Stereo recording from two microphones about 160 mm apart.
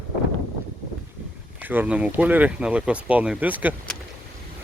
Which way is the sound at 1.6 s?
10° right (ahead or behind).